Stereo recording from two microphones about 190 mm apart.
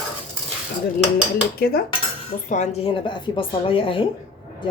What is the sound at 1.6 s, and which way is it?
Cutlery, 55° left (ahead or behind).